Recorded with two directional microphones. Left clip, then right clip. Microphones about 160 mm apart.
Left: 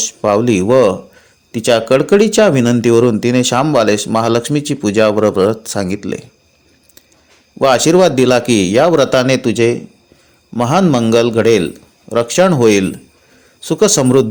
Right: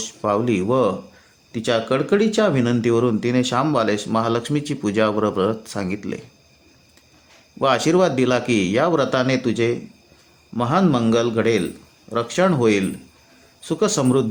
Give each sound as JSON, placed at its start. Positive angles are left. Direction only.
{"t": 0.0, "sound": "speech", "side_deg": 35}
{"t": 7.6, "sound": "speech", "side_deg": 35}